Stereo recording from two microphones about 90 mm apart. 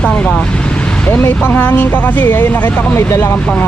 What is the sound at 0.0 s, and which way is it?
Speech, 10° left (ahead or behind).